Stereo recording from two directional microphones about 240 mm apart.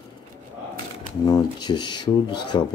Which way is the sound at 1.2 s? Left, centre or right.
Centre.